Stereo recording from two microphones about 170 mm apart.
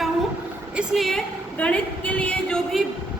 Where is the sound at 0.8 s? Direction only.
Centre (ahead or behind).